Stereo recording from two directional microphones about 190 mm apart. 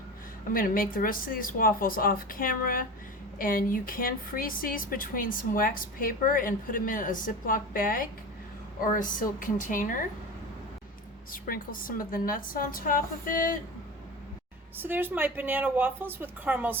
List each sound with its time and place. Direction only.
0.5 s a woman's voice: 50° left (ahead or behind)
11.3 s a woman's voice: 50° left (ahead or behind)
14.8 s a woman's voice: 10° right (ahead or behind)